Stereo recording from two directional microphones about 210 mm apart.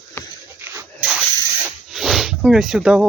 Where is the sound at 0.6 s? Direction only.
10° right (ahead or behind).